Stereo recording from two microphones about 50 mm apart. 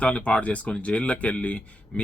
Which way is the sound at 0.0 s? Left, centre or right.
Left.